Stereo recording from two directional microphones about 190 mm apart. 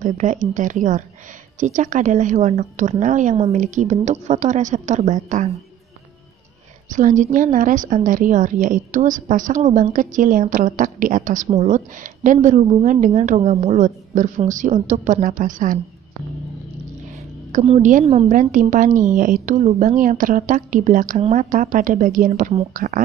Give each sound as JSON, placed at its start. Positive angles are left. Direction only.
{"t": 0.0, "sound": "a woman's voice", "side_deg": -40}
{"t": 6.9, "sound": "a woman's voice", "side_deg": -40}
{"t": 17.5, "sound": "a woman's voice", "side_deg": -35}